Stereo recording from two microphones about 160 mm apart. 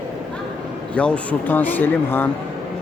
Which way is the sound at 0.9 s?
5° left (ahead or behind).